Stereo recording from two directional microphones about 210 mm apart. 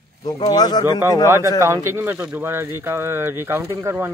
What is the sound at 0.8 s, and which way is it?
Speech, 15° right (ahead or behind).